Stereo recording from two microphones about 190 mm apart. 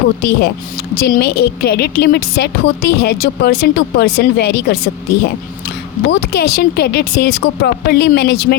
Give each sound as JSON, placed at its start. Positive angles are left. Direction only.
{"t": 0.2, "sound": "a woman's voice", "side_deg": 60}